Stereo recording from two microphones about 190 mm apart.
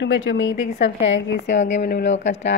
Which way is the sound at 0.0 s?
70° left (ahead or behind).